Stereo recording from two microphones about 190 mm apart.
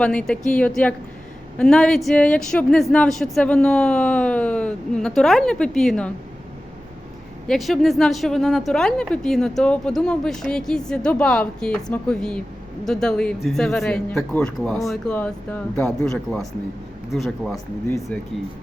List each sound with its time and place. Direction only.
0.0 s speech: 5° left (ahead or behind)
7.4 s speech: centre (ahead or behind)
17.8 s speech: 15° left (ahead or behind)